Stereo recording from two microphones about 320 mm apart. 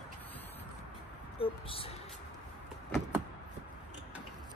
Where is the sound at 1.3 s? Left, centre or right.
Centre.